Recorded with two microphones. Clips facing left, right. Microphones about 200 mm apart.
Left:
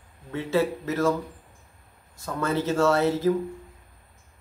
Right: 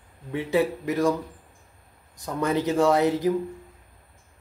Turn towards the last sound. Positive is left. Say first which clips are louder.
# right 1 dB
turn(degrees=-15)  # may be behind; listen again after turning